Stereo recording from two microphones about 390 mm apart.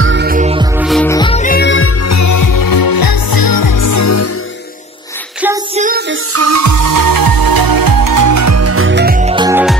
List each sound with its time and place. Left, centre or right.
0.0 s music: right
0.7 s music: centre; by 1.9 s left
2.0 s music: left
5.8 s music: right
6.3 s music: right; by 9.8 s centre